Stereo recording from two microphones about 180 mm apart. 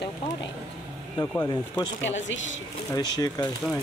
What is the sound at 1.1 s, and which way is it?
Speech, 20° left (ahead or behind).